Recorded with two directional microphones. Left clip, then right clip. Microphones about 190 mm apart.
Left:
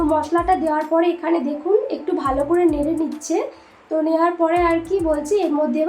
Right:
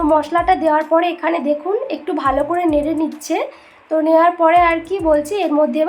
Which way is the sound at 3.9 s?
40° right (ahead or behind).